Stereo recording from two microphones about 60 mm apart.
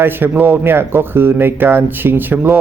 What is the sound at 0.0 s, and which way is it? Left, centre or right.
Speech, right.